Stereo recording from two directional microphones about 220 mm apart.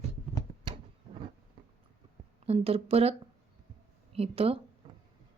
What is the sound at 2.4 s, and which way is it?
Speech, 25° right (ahead or behind).